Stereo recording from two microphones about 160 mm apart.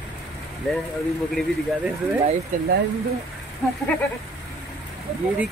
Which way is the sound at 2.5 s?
55° right (ahead or behind).